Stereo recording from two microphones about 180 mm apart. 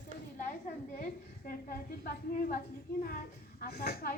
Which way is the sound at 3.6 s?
60° left (ahead or behind).